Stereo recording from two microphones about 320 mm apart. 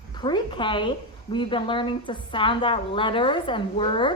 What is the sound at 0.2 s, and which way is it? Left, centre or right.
Speech, centre.